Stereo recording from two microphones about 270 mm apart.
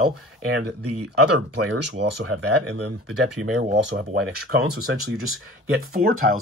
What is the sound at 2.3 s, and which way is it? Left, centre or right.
Speech, right.